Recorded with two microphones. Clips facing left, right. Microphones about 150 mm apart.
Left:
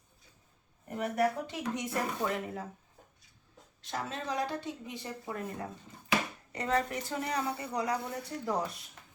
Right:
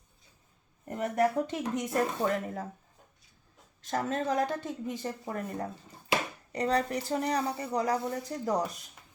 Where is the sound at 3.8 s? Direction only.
45° right (ahead or behind).